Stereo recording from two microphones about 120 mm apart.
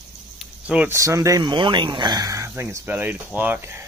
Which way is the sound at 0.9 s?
25° right (ahead or behind).